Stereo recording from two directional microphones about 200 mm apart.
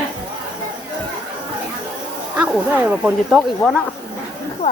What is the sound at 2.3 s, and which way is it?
Speech, 10° right (ahead or behind).